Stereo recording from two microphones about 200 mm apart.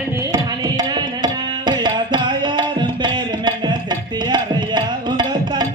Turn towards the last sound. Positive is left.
turn(degrees=-20)  # may be behind; listen again after turning